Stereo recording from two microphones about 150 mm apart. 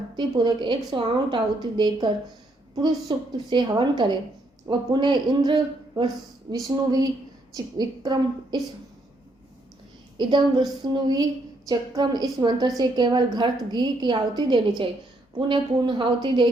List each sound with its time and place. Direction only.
0.2 s a woman's voice: 30° right (ahead or behind)
10.2 s a woman's voice: 30° right (ahead or behind)